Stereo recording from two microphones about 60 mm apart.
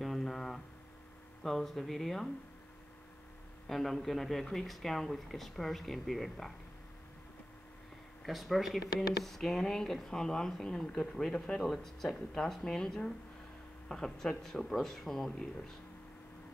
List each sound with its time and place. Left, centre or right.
0.0 s a sound: centre
1.4 s speech: centre
3.6 s speech: centre
8.2 s speech: centre